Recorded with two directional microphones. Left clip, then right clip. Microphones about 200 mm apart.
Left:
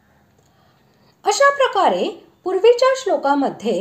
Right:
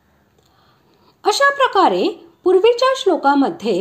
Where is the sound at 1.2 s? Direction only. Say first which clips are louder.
Even; 25° right (ahead or behind).